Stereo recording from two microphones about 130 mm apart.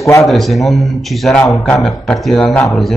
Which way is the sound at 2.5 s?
20° left (ahead or behind).